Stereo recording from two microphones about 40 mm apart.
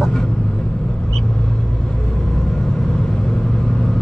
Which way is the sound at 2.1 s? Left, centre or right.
Centre.